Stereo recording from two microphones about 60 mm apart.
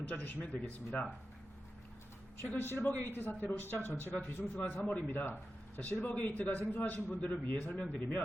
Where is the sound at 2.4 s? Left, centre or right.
Left.